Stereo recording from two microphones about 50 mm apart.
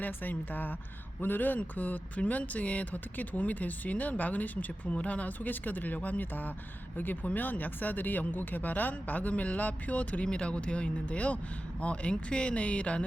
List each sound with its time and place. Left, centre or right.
0.0 s speech: left